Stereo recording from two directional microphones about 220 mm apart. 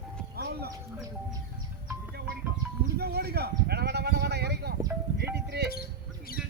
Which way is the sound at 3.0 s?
45° right (ahead or behind).